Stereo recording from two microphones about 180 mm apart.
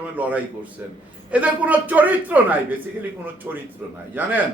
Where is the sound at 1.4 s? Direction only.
10° right (ahead or behind).